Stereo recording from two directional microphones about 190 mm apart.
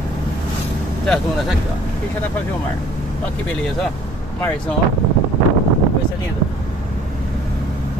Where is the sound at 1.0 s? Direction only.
5° left (ahead or behind).